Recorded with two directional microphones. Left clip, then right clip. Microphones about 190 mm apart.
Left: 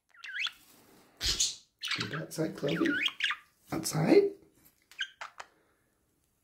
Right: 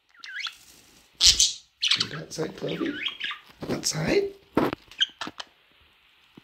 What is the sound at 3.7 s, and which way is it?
Speech, 10° left (ahead or behind).